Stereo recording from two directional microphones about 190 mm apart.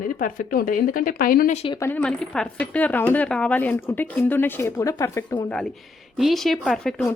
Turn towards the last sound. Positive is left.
turn(degrees=5)  # may be behind; listen again after turning